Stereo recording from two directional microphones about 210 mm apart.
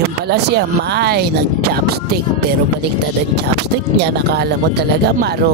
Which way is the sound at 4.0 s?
50° right (ahead or behind).